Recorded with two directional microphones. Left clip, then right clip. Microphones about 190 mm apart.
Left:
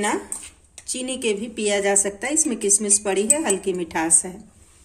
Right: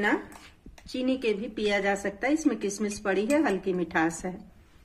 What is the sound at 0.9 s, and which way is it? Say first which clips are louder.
A woman's voice: left 3 dB; 40° right (ahead or behind).